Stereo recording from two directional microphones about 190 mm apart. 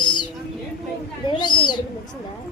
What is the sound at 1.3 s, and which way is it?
Speech, 25° left (ahead or behind).